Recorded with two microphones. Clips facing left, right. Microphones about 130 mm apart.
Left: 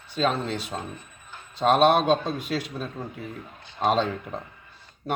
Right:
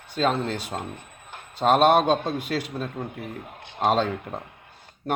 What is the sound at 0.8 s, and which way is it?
Music, 60° right (ahead or behind).